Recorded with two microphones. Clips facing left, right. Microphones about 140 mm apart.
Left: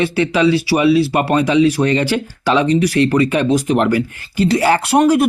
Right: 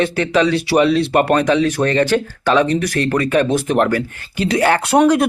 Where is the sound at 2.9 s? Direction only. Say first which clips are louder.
Left 2 dB; 45° right (ahead or behind).